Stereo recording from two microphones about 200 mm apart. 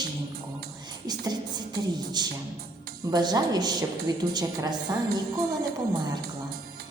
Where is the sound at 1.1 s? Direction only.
20° right (ahead or behind).